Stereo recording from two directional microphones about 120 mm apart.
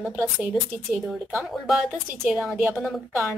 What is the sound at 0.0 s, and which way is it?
Speech, 15° right (ahead or behind).